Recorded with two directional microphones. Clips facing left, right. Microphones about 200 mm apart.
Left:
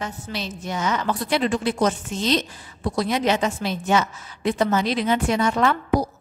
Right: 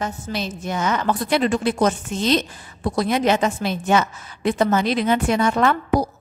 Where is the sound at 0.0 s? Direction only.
50° right (ahead or behind).